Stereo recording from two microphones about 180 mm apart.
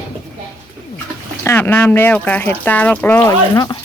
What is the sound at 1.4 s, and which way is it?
Speech, 15° left (ahead or behind).